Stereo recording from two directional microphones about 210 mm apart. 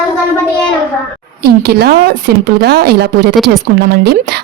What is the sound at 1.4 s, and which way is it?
Speech, 45° right (ahead or behind).